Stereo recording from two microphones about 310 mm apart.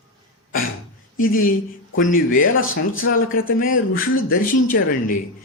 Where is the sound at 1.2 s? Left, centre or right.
Left.